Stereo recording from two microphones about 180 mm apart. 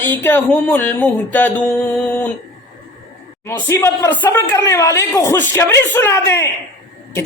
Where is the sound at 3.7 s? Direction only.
15° left (ahead or behind).